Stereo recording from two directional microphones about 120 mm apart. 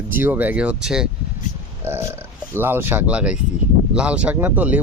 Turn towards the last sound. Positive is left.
turn(degrees=-15)  # may be behind; listen again after turning